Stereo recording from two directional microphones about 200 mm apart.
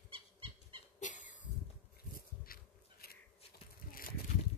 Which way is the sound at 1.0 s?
40° left (ahead or behind).